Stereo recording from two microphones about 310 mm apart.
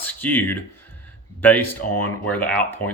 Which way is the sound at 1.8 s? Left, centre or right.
Left.